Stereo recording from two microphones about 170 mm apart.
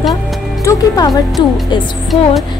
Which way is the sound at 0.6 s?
20° left (ahead or behind).